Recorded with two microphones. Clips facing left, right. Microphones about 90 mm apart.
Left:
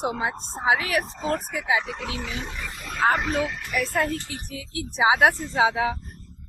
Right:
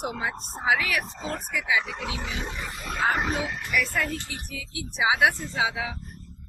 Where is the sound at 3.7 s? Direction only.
35° left (ahead or behind).